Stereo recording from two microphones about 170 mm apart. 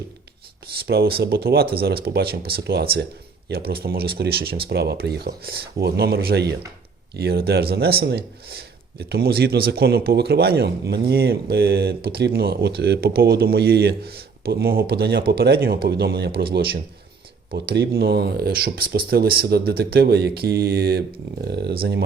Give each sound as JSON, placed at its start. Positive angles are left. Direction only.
{"t": 0.9, "sound": "speech", "side_deg": -65}
{"t": 17.5, "sound": "speech", "side_deg": -65}